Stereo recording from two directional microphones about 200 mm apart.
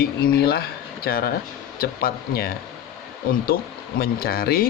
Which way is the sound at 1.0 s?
50° left (ahead or behind).